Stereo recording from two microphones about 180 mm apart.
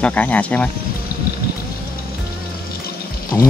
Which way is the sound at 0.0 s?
10° left (ahead or behind).